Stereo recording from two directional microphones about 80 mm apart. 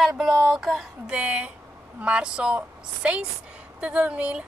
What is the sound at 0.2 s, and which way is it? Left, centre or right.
A woman's voice, centre.